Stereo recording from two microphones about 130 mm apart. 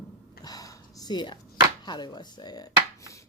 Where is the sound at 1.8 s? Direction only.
35° left (ahead or behind).